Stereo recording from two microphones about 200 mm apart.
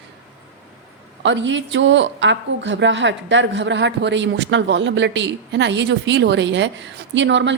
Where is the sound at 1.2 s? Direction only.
65° right (ahead or behind).